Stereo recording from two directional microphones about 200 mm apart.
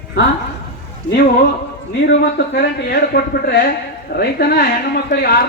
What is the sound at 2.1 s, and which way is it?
A woman's voice, 55° left (ahead or behind).